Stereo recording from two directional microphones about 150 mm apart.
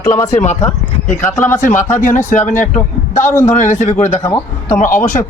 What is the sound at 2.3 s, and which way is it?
Speech, 55° left (ahead or behind).